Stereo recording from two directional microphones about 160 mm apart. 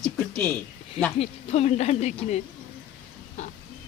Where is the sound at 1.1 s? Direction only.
40° left (ahead or behind).